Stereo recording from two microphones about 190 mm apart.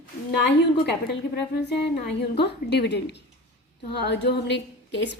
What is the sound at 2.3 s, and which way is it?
A woman's voice, 60° left (ahead or behind).